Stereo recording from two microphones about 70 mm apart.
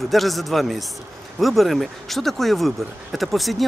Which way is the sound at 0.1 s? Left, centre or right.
Centre.